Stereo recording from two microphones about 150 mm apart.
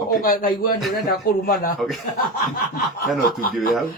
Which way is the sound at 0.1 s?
70° left (ahead or behind).